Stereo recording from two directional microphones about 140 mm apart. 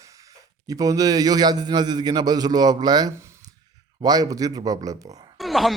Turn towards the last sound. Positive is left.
turn(degrees=0)  # may be behind; listen again after turning